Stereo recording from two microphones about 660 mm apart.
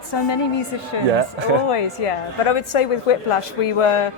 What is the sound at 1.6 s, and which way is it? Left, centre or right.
A woman's voice, left.